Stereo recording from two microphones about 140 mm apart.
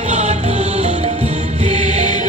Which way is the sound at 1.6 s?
55° right (ahead or behind).